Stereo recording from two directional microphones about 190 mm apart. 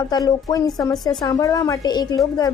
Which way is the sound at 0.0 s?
20° left (ahead or behind).